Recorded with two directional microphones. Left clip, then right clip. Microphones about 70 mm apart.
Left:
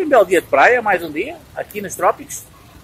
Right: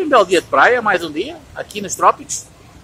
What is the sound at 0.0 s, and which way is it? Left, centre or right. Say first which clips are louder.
Speech: even; centre.